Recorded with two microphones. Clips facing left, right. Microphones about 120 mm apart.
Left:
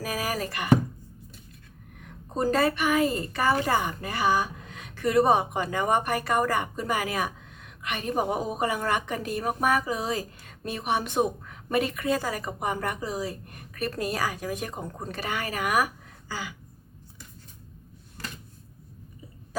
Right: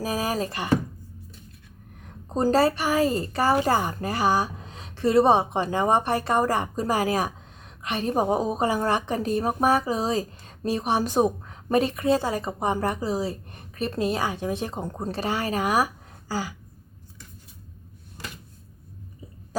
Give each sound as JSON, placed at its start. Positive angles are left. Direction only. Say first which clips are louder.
{"t": 0.0, "sound": "speech", "louder": "right 4 dB", "side_deg": -30}
{"t": 2.0, "sound": "a woman's voice", "louder": "right 3 dB", "side_deg": -35}